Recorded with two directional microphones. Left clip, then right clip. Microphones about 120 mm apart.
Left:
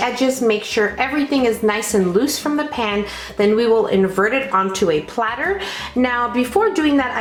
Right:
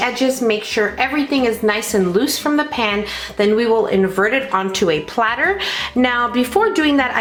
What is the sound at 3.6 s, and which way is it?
Speech, 20° right (ahead or behind).